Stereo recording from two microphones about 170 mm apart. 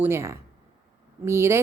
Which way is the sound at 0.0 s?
15° right (ahead or behind).